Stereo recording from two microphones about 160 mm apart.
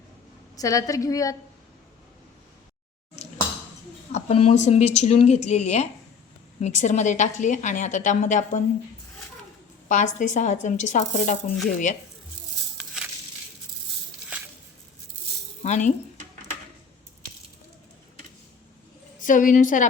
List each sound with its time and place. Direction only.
0.5 s a woman's voice: 20° left (ahead or behind)
4.1 s a woman's voice: 40° left (ahead or behind)
9.9 s a woman's voice: 50° left (ahead or behind)
15.6 s a woman's voice: 45° left (ahead or behind)
19.2 s a woman's voice: 55° left (ahead or behind)